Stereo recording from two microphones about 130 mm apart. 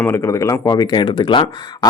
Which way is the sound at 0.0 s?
20° left (ahead or behind).